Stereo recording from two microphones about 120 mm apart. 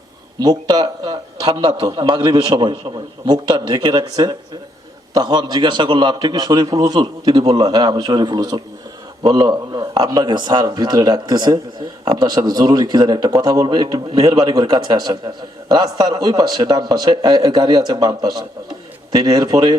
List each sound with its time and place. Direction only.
0.3 s speech: 35° right (ahead or behind)